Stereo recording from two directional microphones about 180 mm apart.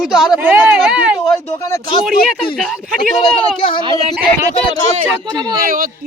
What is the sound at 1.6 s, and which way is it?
Speech, 20° left (ahead or behind).